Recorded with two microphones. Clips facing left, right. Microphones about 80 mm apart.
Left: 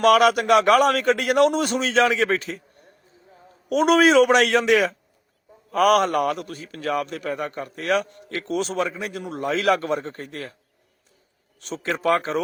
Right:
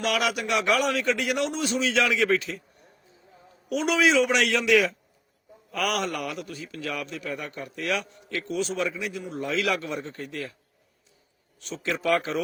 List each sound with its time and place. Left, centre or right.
0.0 s a man's voice: left
3.7 s a man's voice: left
11.6 s a man's voice: left